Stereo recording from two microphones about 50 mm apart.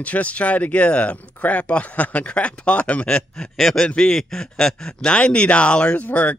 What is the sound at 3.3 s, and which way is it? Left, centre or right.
A man's voice, centre.